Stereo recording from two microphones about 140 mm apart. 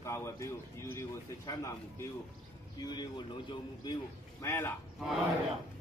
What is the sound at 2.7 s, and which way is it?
Speech, 30° left (ahead or behind).